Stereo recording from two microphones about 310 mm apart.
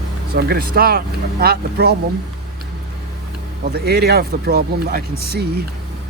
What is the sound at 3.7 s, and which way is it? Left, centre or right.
Speech, right.